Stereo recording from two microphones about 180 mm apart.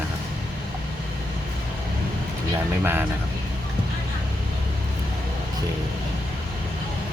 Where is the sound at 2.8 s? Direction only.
10° right (ahead or behind).